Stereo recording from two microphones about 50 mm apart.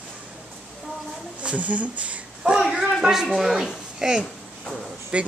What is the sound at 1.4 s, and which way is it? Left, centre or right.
Speech, right.